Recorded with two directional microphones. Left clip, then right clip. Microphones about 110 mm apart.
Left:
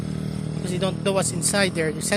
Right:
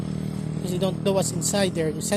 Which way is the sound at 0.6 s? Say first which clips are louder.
Even; 45° right (ahead or behind).